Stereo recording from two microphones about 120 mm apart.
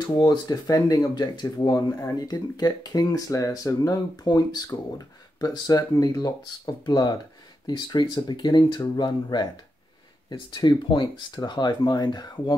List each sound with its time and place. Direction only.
0.2 s speech: 35° left (ahead or behind)